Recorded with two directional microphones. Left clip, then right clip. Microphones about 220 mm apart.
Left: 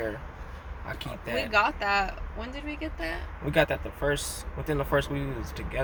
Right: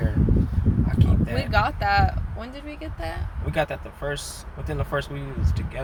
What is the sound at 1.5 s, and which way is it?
Speech, 20° right (ahead or behind).